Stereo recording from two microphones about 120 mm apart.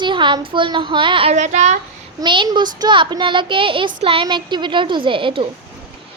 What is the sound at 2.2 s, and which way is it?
A woman's voice, 40° right (ahead or behind).